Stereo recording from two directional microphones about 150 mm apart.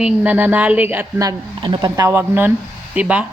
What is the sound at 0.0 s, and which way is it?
A woman's voice, 10° right (ahead or behind).